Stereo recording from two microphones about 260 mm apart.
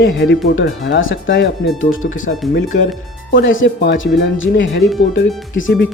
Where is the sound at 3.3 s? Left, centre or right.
Left.